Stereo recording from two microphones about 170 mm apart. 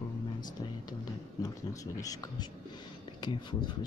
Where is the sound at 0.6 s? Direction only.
25° left (ahead or behind).